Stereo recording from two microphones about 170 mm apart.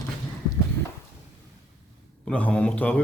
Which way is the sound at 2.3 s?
10° left (ahead or behind).